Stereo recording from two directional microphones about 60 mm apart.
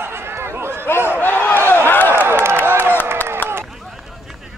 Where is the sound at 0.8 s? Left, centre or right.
Left.